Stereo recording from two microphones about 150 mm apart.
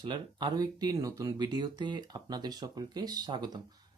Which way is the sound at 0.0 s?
30° right (ahead or behind).